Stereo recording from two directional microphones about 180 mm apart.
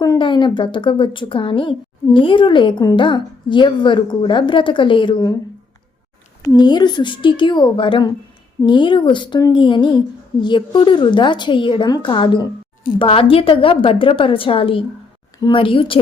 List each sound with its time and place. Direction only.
0.0 s a woman's voice: 25° left (ahead or behind)
6.4 s a woman's voice: 20° left (ahead or behind)